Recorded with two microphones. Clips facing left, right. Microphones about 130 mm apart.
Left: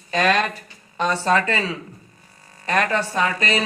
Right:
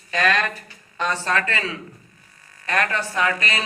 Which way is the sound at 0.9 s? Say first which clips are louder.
Left 4 dB; 15° left (ahead or behind).